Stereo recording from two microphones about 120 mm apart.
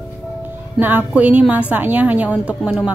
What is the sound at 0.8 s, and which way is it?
Speech, 15° right (ahead or behind).